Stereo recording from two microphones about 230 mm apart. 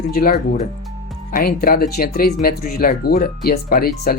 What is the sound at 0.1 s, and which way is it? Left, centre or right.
Speech, left.